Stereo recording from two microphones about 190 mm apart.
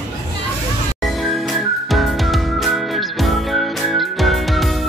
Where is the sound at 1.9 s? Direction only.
Centre (ahead or behind).